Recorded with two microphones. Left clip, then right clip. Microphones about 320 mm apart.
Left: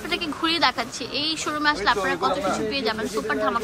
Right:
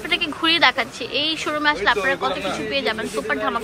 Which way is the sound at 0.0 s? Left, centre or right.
Centre.